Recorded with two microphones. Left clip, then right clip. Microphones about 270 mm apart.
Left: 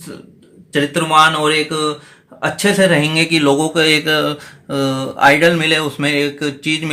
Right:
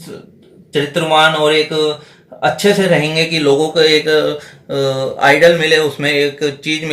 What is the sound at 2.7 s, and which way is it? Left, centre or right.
Speech, centre.